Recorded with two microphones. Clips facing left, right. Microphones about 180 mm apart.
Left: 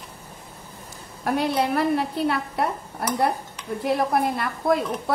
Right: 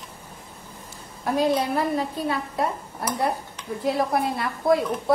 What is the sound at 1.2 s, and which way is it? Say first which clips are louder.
A woman's voice: right 1 dB; 65° left (ahead or behind).